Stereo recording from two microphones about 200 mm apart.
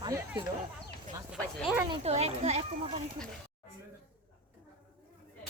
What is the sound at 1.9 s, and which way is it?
Speech, 30° right (ahead or behind).